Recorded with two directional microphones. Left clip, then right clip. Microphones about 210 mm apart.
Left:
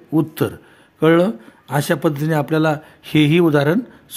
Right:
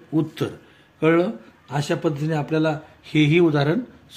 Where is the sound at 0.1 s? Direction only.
40° left (ahead or behind).